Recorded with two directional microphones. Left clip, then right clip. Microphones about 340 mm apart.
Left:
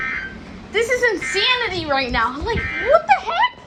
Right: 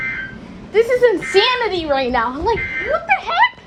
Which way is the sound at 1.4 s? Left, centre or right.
Centre.